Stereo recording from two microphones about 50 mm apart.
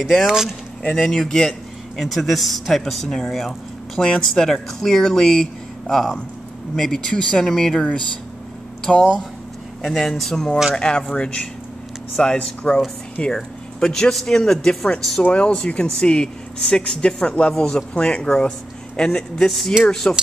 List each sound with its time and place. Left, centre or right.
0.3 s speech: centre
0.9 s speech: centre; by 12.8 s left
13.3 s speech: centre
15.3 s speech: centre